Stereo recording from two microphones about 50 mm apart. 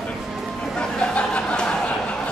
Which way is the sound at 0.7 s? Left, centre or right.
Left.